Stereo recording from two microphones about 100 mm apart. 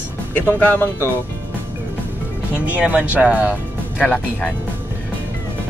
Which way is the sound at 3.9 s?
10° left (ahead or behind).